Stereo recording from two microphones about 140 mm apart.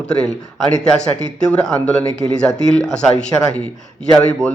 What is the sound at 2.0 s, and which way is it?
Speech, 35° right (ahead or behind).